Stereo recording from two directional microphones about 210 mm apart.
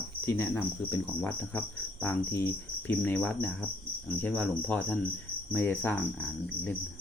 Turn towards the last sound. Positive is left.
turn(degrees=10)  # may be behind; listen again after turning